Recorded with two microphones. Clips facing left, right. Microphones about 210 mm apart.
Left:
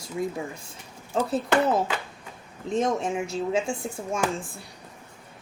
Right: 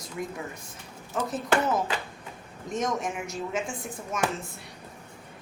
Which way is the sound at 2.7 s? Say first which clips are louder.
Left 5 dB; 30° left (ahead or behind).